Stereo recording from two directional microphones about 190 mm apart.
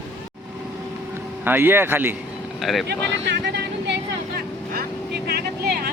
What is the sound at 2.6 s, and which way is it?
Speech, centre (ahead or behind).